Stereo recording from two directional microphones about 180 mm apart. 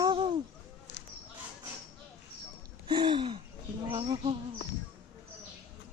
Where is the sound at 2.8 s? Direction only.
25° right (ahead or behind).